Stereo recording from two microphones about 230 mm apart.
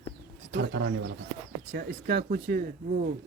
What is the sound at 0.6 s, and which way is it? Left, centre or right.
A man's voice, right.